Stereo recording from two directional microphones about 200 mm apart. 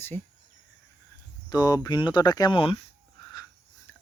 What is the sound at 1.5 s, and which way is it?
Speech, 20° left (ahead or behind).